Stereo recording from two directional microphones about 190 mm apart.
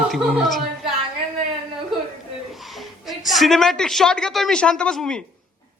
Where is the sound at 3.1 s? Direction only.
Centre (ahead or behind).